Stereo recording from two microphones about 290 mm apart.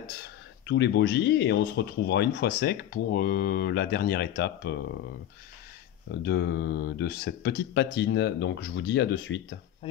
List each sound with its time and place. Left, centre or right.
0.2 s speech: left
6.2 s speech: left